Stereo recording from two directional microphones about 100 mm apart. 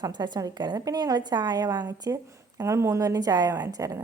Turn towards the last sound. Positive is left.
turn(degrees=-35)  # may be behind; listen again after turning